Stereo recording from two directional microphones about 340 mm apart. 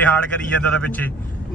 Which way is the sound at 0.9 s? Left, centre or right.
Centre.